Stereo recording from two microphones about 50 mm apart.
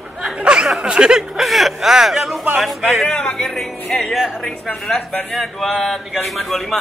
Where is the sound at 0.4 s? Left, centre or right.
Centre.